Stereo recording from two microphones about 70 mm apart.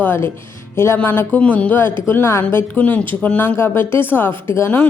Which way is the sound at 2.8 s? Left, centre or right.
Left.